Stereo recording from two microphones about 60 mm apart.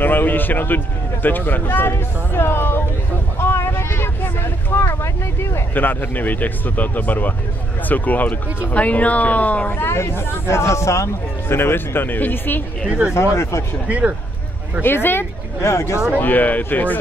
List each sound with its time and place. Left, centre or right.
0.0 s speech: left
3.3 s vehicle: left
5.8 s speech: left
9.7 s speech: left
11.4 s speech: left
13.1 s speech: left
13.8 s speech: right
14.8 s speech: left
16.1 s speech: left